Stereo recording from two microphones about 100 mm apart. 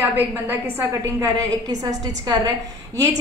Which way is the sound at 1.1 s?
35° right (ahead or behind).